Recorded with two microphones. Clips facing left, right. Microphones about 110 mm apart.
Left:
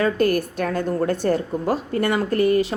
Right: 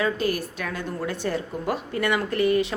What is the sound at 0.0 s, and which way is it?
A woman's voice, 50° left (ahead or behind).